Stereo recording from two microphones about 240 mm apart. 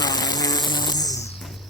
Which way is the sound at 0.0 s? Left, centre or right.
Centre.